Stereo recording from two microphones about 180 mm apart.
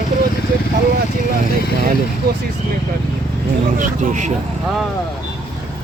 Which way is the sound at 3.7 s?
45° right (ahead or behind).